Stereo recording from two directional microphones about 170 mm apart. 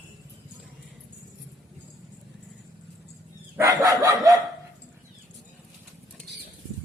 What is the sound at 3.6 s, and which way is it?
Dog, 20° right (ahead or behind).